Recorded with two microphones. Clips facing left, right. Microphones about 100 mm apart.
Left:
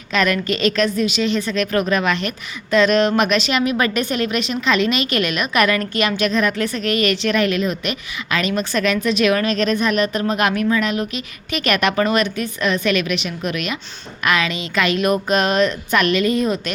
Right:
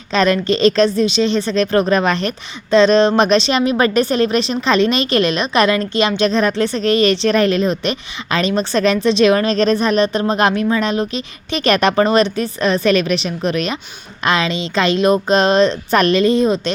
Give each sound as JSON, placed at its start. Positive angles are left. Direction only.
{"t": 0.1, "sound": "a woman's voice", "side_deg": -30}